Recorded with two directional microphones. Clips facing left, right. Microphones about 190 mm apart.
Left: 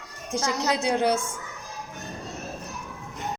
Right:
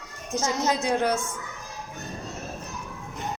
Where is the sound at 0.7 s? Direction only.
15° left (ahead or behind).